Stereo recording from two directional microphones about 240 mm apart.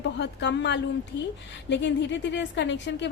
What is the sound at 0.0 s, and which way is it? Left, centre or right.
A woman's voice, left.